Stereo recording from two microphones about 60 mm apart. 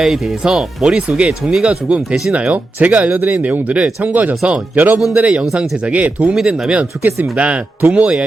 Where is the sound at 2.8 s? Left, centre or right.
Right.